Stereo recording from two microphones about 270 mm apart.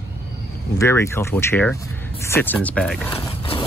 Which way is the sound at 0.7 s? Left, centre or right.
Centre.